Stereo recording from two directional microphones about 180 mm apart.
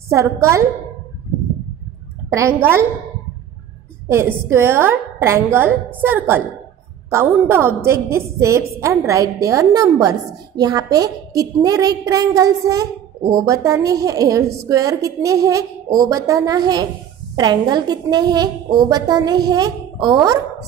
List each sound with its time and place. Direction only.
0.1 s a woman's voice: 15° right (ahead or behind)
2.2 s a woman's voice: 15° right (ahead or behind)
4.1 s a woman's voice: 15° right (ahead or behind)